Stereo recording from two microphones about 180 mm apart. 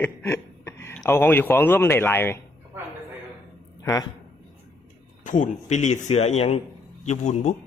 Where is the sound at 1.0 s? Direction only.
10° left (ahead or behind).